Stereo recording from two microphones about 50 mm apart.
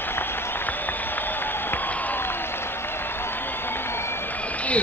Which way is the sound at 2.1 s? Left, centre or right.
Left.